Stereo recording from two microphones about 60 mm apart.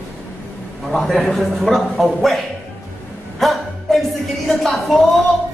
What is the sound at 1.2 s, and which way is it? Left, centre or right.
Speech, centre.